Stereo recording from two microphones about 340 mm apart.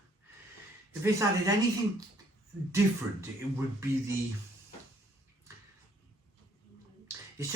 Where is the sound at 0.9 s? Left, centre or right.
Centre.